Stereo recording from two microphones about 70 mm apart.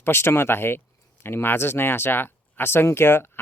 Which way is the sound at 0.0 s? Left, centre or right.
Left.